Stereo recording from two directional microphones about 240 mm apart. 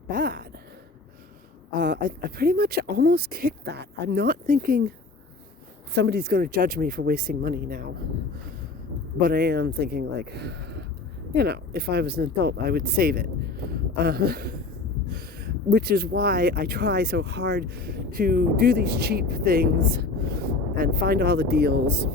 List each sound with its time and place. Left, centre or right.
0.1 s speech: right
1.7 s speech: right
5.9 s speech: right
9.2 s speech: right